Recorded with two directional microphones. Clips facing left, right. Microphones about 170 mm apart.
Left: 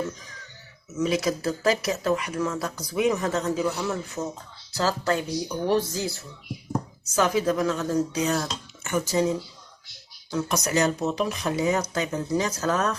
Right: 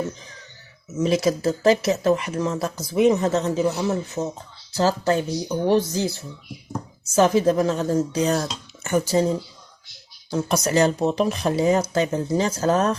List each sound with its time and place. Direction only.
1.2 s speech: 25° right (ahead or behind)
10.3 s speech: 30° right (ahead or behind)